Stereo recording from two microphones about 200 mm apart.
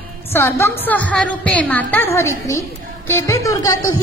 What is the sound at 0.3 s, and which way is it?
A woman's voice, 10° left (ahead or behind).